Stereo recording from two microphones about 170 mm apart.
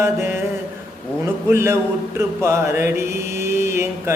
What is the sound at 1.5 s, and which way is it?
Music, 15° right (ahead or behind).